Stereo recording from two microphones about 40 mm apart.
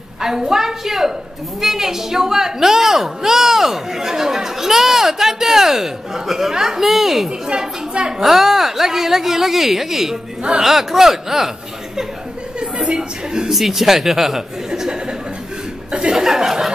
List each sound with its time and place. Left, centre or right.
0.2 s a woman's voice: centre
7.2 s a woman's voice: right
8.2 s a woman's voice: centre
12.5 s a woman's voice: right
13.5 s a woman's voice: centre